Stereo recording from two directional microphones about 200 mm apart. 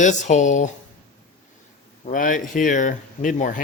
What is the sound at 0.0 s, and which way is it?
Speech, 35° left (ahead or behind).